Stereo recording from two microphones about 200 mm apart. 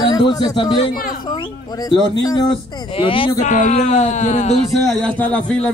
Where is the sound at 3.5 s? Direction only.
40° left (ahead or behind).